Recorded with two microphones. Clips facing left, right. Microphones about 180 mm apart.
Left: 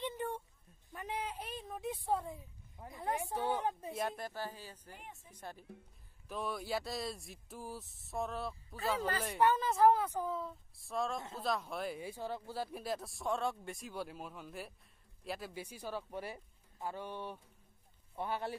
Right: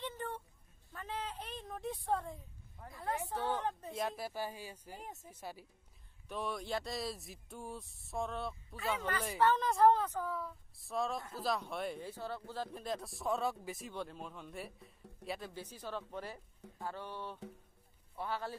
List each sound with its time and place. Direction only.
0.0 s a sound: 10° left (ahead or behind)
2.8 s a woman's voice: 20° left (ahead or behind); by 4.3 s centre (ahead or behind)
4.3 s a man's voice: 10° right (ahead or behind)
4.9 s speech: 40° right (ahead or behind)
5.3 s a man's voice: 5° right (ahead or behind)
8.7 s speech: 35° left (ahead or behind)
9.4 s a woman's voice: 10° left (ahead or behind)
10.8 s speech: centre (ahead or behind)
12.0 s a woman's voice: 15° left (ahead or behind)